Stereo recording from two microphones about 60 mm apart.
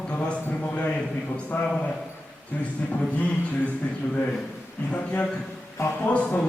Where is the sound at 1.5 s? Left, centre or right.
Left.